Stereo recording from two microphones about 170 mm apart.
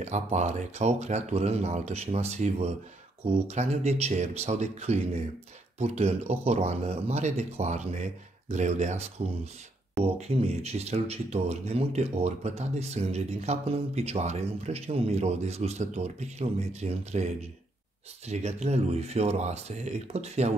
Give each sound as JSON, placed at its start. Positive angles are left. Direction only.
{"t": 0.0, "sound": "speech", "side_deg": -45}